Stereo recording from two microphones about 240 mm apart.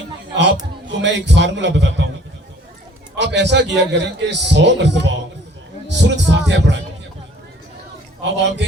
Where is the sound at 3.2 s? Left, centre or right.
Right.